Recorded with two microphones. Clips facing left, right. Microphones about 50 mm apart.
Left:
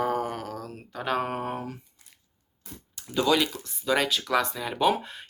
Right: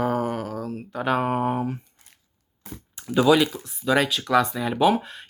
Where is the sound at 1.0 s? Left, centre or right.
Centre.